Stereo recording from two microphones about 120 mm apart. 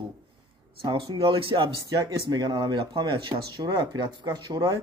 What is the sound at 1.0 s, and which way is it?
Speech, 45° right (ahead or behind).